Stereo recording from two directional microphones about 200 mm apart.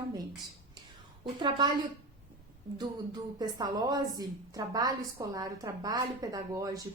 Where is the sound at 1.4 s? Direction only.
20° right (ahead or behind).